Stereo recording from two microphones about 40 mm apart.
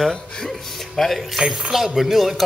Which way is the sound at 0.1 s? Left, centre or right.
Centre.